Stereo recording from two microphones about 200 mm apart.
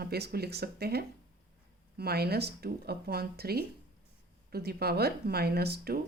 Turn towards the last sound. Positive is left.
turn(degrees=-50)  # may be behind; listen again after turning